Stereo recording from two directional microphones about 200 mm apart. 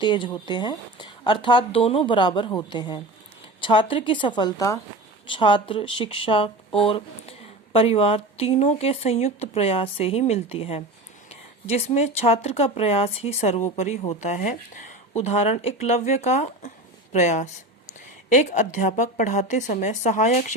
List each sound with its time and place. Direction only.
0.0 s speech: 25° left (ahead or behind)
16.6 s a sound: 35° left (ahead or behind)
18.3 s speech: 40° left (ahead or behind)